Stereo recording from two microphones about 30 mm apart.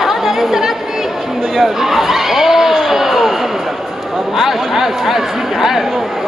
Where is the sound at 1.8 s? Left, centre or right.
Centre.